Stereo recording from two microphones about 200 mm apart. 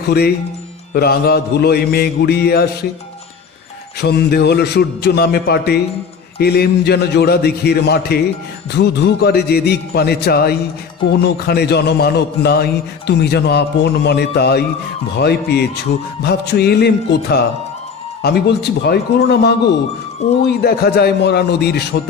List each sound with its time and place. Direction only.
0.9 s a man's voice: 50° left (ahead or behind)
4.0 s a man's voice: 55° left (ahead or behind)